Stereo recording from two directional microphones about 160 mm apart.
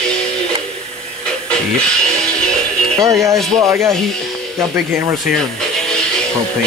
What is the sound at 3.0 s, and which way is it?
Speech, 20° right (ahead or behind).